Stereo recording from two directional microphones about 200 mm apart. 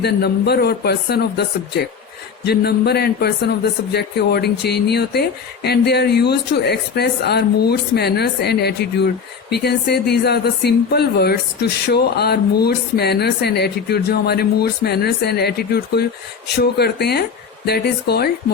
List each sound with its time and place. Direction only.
0.0 s speech: 55° left (ahead or behind)